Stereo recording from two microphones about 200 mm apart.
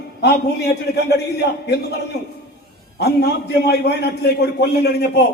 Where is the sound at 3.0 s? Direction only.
55° left (ahead or behind).